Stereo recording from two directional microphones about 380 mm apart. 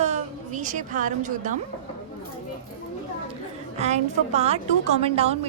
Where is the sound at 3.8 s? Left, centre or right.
Centre.